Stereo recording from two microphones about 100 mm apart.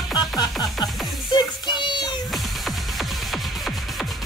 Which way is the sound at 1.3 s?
45° left (ahead or behind).